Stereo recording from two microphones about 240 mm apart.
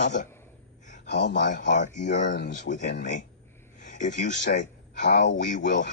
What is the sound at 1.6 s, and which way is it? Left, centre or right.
Speech, left.